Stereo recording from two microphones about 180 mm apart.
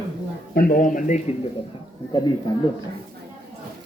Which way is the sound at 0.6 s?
55° left (ahead or behind).